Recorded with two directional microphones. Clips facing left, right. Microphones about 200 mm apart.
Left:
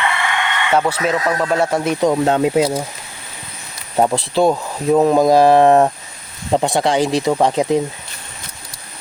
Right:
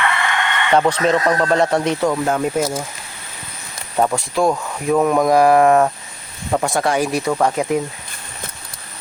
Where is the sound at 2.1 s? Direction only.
25° left (ahead or behind).